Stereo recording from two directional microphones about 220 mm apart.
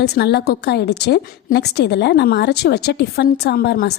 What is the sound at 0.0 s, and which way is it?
A woman's voice, 50° left (ahead or behind).